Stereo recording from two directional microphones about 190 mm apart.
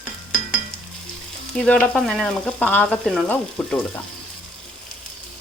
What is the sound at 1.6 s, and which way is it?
Frying, 5° left (ahead or behind).